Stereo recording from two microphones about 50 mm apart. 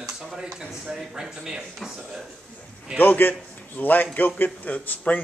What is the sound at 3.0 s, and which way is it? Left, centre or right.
A man's voice, left.